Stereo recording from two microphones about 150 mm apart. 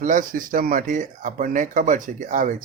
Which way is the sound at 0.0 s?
65° right (ahead or behind).